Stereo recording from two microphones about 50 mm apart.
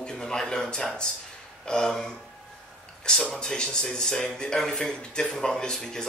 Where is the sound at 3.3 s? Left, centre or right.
Centre.